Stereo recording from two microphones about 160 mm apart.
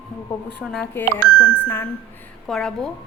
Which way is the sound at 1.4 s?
10° left (ahead or behind).